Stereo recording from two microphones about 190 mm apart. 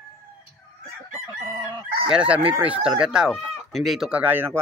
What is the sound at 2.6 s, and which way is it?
Speech, 5° right (ahead or behind).